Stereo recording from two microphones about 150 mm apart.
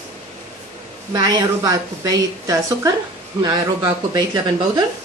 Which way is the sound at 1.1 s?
25° right (ahead or behind).